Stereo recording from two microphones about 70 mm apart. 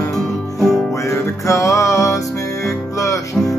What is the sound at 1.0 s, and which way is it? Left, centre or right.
Music, left.